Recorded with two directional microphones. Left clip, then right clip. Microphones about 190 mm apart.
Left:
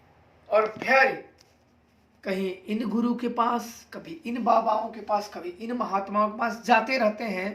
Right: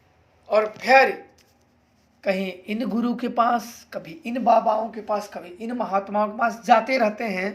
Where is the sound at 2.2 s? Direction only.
25° right (ahead or behind).